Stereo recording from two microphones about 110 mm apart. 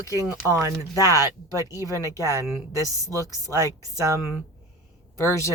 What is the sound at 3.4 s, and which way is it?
Speech, 30° right (ahead or behind).